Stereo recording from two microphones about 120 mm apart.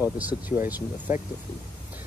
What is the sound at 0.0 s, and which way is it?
Speech, 15° right (ahead or behind).